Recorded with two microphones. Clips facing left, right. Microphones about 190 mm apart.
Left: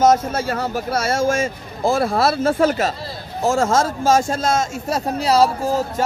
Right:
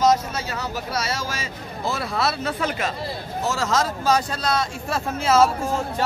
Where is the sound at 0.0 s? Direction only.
50° left (ahead or behind); by 5.5 s 35° left (ahead or behind).